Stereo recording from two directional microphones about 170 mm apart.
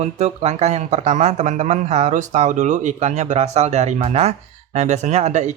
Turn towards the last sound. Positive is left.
turn(degrees=-45)  # may be behind; listen again after turning